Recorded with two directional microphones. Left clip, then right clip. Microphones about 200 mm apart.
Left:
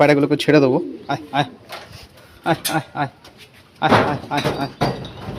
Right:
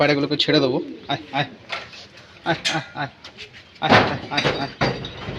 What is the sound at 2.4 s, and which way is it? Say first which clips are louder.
Speech: left 2 dB; 40° left (ahead or behind).